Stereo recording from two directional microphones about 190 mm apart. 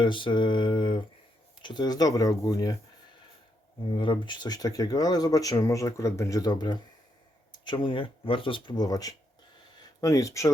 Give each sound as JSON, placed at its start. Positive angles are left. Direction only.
{"t": 0.0, "sound": "speech", "side_deg": 25}
{"t": 3.9, "sound": "speech", "side_deg": 25}